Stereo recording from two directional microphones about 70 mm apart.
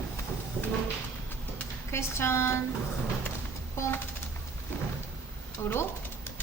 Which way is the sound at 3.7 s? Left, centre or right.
Left.